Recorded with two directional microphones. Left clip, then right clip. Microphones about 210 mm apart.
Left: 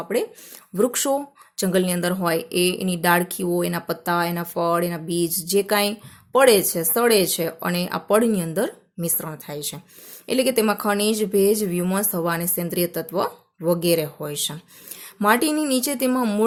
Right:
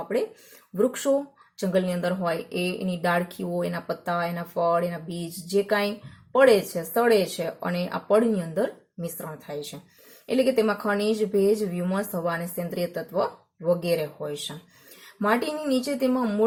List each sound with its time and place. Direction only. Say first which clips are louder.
0.8 s speech: left 2 dB; 40° left (ahead or behind)